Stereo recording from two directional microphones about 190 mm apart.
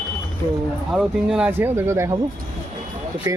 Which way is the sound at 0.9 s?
5° right (ahead or behind).